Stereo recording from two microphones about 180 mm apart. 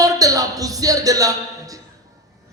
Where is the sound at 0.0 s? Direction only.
20° right (ahead or behind).